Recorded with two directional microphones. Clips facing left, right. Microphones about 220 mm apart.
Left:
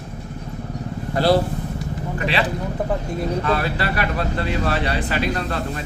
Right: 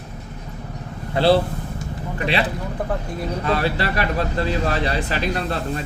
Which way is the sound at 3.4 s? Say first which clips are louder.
Even; 35° right (ahead or behind).